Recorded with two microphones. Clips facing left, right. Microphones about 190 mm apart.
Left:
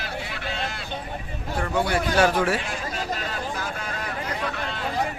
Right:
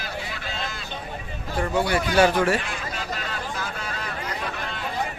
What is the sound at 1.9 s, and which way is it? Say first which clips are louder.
Speech: right 2 dB; centre (ahead or behind).